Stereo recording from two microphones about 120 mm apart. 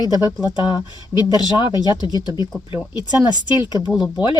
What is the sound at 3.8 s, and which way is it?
Speech, 35° left (ahead or behind).